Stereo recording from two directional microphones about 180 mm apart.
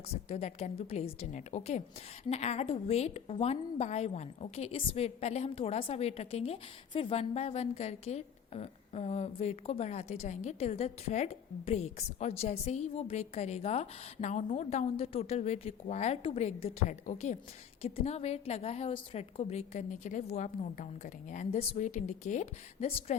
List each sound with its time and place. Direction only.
0.1 s a woman's voice: 35° left (ahead or behind)